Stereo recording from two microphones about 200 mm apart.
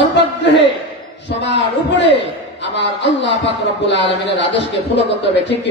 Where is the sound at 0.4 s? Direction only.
60° left (ahead or behind).